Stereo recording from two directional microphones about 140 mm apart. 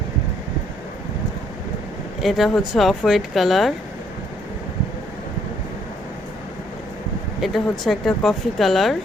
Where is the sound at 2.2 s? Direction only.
Centre (ahead or behind).